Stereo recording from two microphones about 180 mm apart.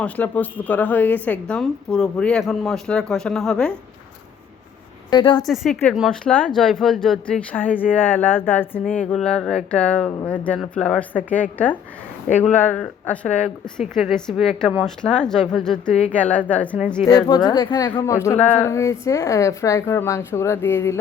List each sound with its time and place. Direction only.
0.0 s a woman's voice: 10° left (ahead or behind)
5.1 s a woman's voice: 25° left (ahead or behind)
5.4 s a woman's voice: centre (ahead or behind)
15.9 s a woman's voice: 40° left (ahead or behind)
16.1 s speech: 10° left (ahead or behind)
17.0 s speech: 20° left (ahead or behind)